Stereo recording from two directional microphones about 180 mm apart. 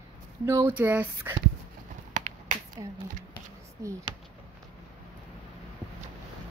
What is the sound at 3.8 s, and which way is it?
Speech, 20° right (ahead or behind).